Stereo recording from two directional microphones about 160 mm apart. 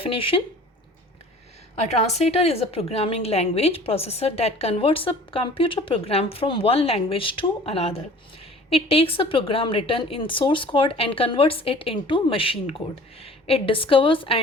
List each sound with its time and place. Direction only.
0.0 s a woman's voice: 35° left (ahead or behind)
1.8 s a woman's voice: 40° left (ahead or behind)